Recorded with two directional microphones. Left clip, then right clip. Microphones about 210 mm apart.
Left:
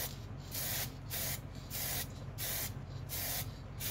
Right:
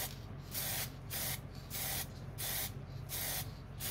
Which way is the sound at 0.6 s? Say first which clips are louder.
Left 1 dB; 10° right (ahead or behind).